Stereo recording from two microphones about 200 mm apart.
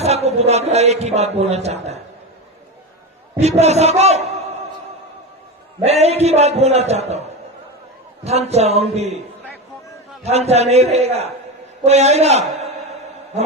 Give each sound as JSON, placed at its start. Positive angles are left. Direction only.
{"t": 0.0, "sound": "a man's voice", "side_deg": -30}
{"t": 3.4, "sound": "a man's voice", "side_deg": -35}
{"t": 5.8, "sound": "a man's voice", "side_deg": -30}
{"t": 10.2, "sound": "a man's voice", "side_deg": -30}